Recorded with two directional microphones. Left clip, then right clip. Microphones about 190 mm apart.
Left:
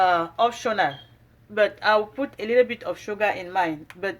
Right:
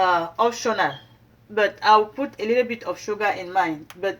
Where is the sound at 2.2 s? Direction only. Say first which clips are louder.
Left 1 dB; 10° left (ahead or behind).